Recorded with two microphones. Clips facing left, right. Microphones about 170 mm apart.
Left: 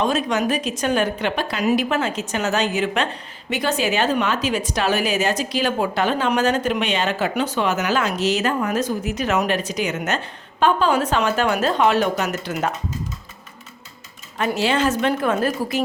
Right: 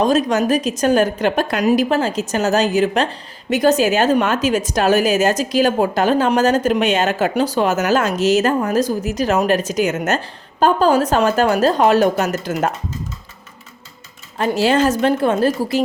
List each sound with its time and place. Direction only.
0.0 s a woman's voice: 40° right (ahead or behind)
14.3 s a woman's voice: 35° right (ahead or behind)